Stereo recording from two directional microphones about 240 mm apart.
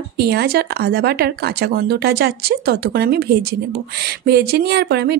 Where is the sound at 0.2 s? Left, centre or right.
Right.